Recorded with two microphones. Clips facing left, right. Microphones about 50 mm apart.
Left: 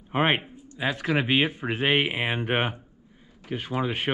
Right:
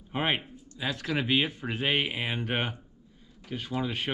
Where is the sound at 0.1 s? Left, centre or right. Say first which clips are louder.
Left 6 dB; left.